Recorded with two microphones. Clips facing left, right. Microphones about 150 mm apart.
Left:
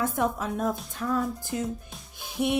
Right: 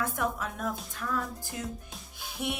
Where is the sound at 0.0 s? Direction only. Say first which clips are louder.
Left 4 dB; 25° left (ahead or behind).